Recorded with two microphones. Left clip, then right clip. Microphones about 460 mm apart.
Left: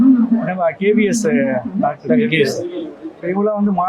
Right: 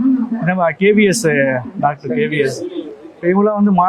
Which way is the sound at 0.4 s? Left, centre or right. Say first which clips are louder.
Right 6 dB; right.